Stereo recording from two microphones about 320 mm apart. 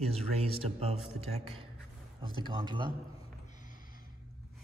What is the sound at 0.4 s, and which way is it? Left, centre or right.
Speech, centre.